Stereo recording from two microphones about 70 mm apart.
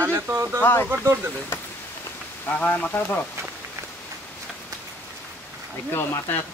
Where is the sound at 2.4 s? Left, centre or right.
Left.